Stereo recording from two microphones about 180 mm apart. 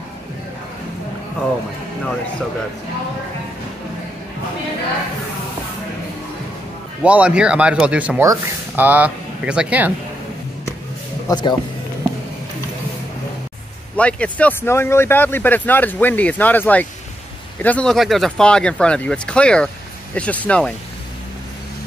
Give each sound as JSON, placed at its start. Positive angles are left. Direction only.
{"t": 7.0, "sound": "speech", "side_deg": -5}
{"t": 11.2, "sound": "speech", "side_deg": 25}
{"t": 13.9, "sound": "speech", "side_deg": 5}